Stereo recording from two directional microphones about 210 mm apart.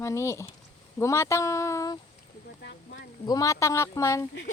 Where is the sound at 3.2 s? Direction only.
15° left (ahead or behind).